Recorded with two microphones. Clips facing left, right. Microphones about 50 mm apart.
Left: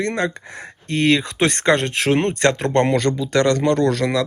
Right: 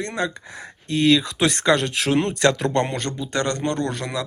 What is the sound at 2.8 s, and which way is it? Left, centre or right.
Speech, left.